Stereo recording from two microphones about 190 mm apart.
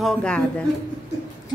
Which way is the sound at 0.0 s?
5° left (ahead or behind).